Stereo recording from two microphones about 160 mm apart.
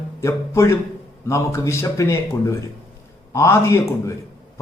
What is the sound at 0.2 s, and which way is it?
A man's voice, 20° left (ahead or behind).